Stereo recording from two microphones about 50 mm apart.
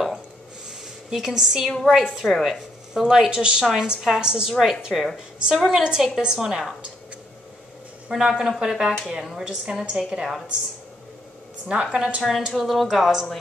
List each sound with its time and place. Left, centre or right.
0.7 s a sound: centre
1.8 s a woman's voice: centre
8.1 s a woman's voice: centre
11.6 s a woman's voice: centre
12.2 s a woman's voice: centre